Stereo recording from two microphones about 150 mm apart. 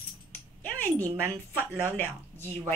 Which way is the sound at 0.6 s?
15° left (ahead or behind).